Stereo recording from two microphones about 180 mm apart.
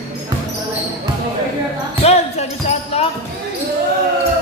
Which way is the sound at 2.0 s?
35° left (ahead or behind).